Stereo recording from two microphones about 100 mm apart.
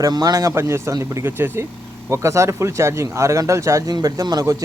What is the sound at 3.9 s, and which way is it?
Speech, 40° right (ahead or behind).